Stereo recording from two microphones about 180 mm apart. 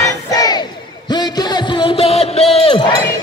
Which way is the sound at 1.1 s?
25° left (ahead or behind).